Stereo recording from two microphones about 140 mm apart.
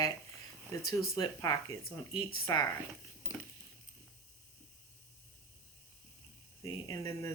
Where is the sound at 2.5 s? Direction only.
25° left (ahead or behind).